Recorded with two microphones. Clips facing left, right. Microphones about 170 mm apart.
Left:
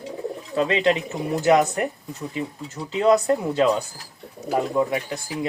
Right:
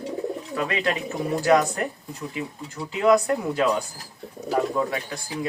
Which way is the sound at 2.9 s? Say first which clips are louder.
Left 1 dB; 25° left (ahead or behind).